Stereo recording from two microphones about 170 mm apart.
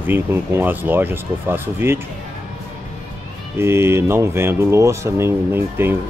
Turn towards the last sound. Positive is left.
turn(degrees=-15)  # may be behind; listen again after turning